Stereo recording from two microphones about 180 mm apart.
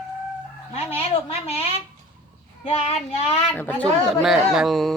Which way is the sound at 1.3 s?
35° left (ahead or behind).